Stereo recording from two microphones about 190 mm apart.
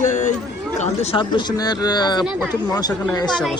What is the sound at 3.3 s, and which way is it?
Speech, centre (ahead or behind).